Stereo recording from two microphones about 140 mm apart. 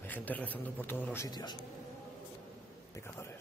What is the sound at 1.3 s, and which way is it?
Speech, 30° left (ahead or behind).